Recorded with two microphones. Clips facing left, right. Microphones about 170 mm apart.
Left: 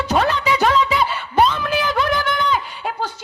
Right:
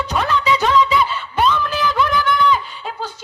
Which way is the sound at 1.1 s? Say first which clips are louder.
Left 1 dB; 50° left (ahead or behind).